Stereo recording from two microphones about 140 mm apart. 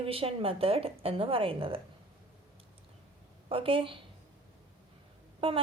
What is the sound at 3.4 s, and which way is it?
Speech, 40° right (ahead or behind).